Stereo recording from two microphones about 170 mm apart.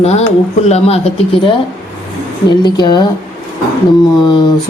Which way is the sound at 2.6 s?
25° left (ahead or behind).